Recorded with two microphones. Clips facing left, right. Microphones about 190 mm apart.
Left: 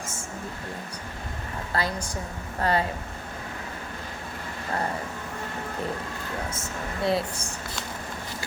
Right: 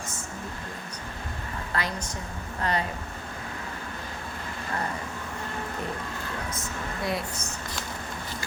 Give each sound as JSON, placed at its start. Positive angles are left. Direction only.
{"t": 1.7, "sound": "a woman's voice", "side_deg": 30}
{"t": 7.0, "sound": "speech", "side_deg": 30}